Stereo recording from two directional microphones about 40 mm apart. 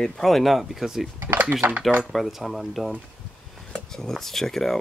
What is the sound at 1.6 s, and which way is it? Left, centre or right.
Speech, right.